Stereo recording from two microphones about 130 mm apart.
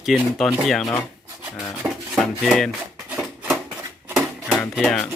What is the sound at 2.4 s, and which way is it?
Speech, centre (ahead or behind).